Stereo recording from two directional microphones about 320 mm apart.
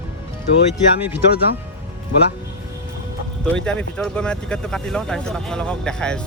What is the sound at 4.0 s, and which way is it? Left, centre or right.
Speech, centre.